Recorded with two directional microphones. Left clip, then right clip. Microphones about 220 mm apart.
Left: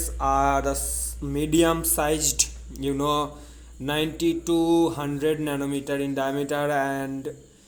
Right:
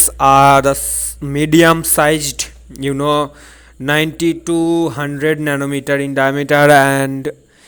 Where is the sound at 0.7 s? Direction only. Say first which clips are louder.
Right 8 dB; 35° right (ahead or behind).